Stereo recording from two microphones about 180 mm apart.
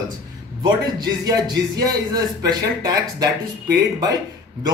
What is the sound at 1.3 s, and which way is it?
Speech, 20° right (ahead or behind).